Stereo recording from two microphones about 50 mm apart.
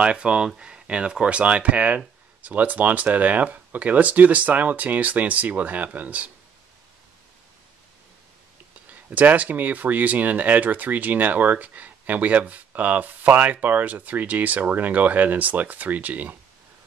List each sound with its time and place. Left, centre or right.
0.0 s speech: right
9.1 s speech: right